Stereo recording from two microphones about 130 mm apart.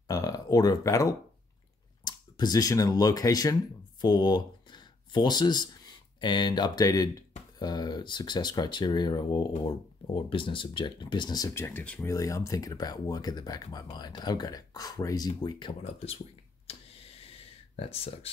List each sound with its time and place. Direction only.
0.1 s speech: 30° left (ahead or behind); by 12.1 s 10° left (ahead or behind)
12.1 s speech: 25° left (ahead or behind)
16.7 s tick-tock: 50° left (ahead or behind)
17.3 s a sound: 45° left (ahead or behind)